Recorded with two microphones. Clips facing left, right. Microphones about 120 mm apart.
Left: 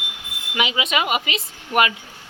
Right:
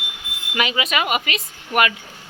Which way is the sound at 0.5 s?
20° left (ahead or behind).